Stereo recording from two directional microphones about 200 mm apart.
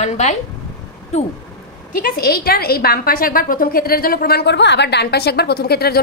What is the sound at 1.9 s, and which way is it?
A woman's voice, 45° left (ahead or behind).